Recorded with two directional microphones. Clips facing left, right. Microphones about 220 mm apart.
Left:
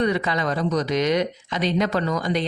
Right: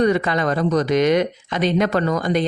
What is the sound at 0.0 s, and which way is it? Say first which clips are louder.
Speech: right 4 dB; 50° right (ahead or behind).